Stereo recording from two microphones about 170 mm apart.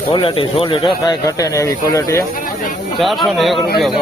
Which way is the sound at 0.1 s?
30° left (ahead or behind).